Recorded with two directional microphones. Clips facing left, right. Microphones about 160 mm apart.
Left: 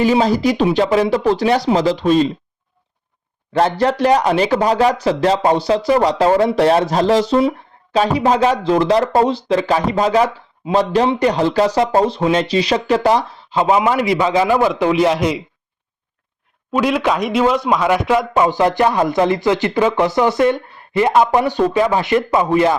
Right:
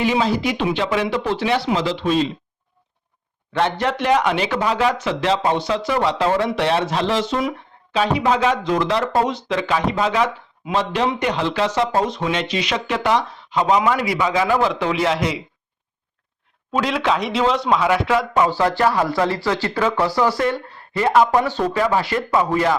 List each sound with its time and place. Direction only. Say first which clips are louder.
0.0 s speech: left 5 dB; 40° left (ahead or behind)
3.5 s speech: left 5 dB; 35° left (ahead or behind)
14.5 s speech: left 4 dB; 15° left (ahead or behind)
16.7 s speech: left 4 dB; 10° left (ahead or behind)